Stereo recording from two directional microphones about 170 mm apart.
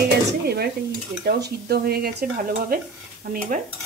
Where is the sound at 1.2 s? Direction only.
70° right (ahead or behind).